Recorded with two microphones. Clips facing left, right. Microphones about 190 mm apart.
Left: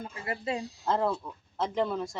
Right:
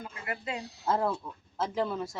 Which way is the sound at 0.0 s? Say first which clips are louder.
Left 3 dB; 30° left (ahead or behind).